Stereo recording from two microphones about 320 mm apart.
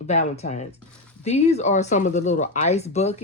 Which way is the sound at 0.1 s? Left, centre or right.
Left.